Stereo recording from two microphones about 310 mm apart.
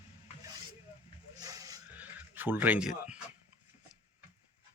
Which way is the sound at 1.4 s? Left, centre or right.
Centre.